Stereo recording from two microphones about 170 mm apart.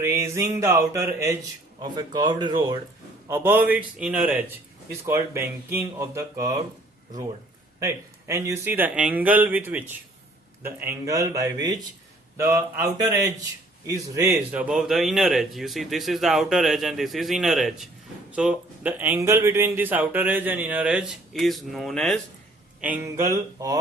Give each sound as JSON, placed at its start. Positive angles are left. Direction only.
{"t": 0.0, "sound": "a man's voice", "side_deg": -15}
{"t": 3.2, "sound": "speech", "side_deg": -10}
{"t": 7.8, "sound": "a man's voice", "side_deg": -20}
{"t": 22.8, "sound": "a man's voice", "side_deg": -10}